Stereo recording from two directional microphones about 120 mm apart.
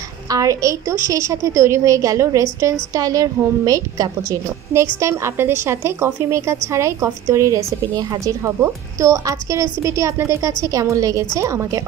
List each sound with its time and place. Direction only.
0.3 s a woman's voice: 25° right (ahead or behind)